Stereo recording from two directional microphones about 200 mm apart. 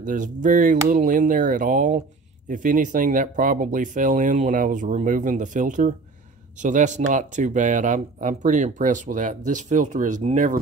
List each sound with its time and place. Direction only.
0.0 s speech: 40° right (ahead or behind)